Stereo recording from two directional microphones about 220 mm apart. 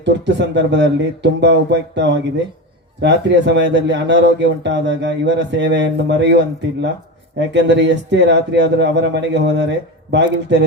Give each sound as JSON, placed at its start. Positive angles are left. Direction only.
{"t": 0.0, "sound": "speech", "side_deg": -50}